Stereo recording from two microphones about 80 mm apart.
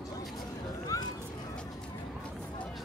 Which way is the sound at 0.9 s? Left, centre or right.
Left.